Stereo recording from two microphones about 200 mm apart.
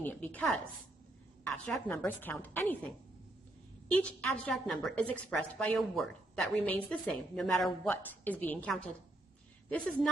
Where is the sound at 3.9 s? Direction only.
5° left (ahead or behind).